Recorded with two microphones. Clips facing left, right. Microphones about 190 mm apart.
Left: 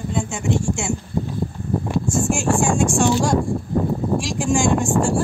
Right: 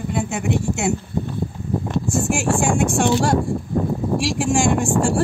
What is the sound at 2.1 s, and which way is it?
Speech, 60° right (ahead or behind).